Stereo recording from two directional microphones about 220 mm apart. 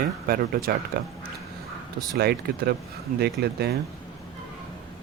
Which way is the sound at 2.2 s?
45° right (ahead or behind).